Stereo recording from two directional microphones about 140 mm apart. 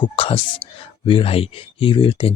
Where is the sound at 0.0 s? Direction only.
40° left (ahead or behind).